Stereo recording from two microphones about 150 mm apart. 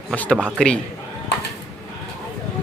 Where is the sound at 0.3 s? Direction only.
10° right (ahead or behind).